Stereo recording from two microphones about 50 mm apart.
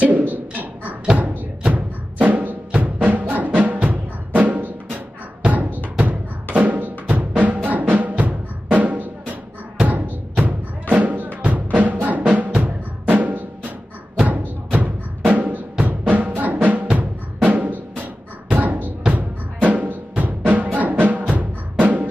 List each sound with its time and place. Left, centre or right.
0.0 s a sound: right
1.1 s music: right
12.5 s drum: right
14.2 s music: right
17.4 s drum: right
18.5 s a sound: right
19.1 s music: right